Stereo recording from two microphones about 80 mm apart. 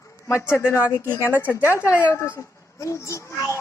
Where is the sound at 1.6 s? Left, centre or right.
Left.